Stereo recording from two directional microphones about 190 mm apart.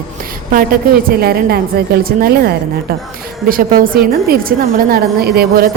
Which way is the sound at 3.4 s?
50° right (ahead or behind).